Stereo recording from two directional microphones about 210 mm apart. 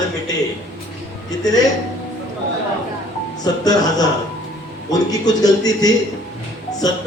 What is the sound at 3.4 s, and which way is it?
A man's voice, 20° left (ahead or behind).